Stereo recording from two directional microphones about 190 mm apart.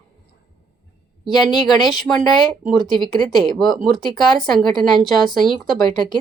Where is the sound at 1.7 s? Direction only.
20° left (ahead or behind).